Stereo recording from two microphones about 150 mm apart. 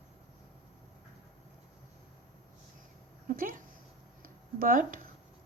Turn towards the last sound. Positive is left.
turn(degrees=-65)  # may be behind; listen again after turning